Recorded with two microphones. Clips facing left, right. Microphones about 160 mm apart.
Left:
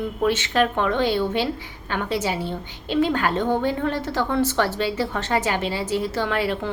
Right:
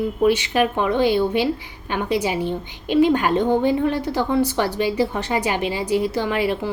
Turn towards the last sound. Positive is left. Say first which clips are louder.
# right 2 dB
turn(degrees=-15)  # may be behind; listen again after turning